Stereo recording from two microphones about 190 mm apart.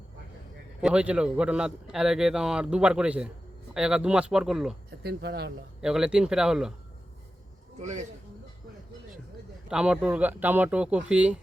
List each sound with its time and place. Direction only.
0.8 s a man's voice: 5° right (ahead or behind)
5.0 s speech: 60° right (ahead or behind)
5.8 s a man's voice: 5° right (ahead or behind)
7.8 s speech: 35° right (ahead or behind)
9.6 s speech: 5° right (ahead or behind)